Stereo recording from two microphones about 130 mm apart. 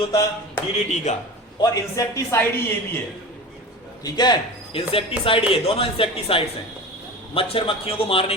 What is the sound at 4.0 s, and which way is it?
Speech, 30° left (ahead or behind).